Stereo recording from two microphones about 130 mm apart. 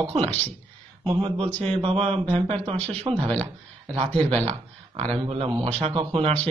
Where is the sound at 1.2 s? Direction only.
45° right (ahead or behind).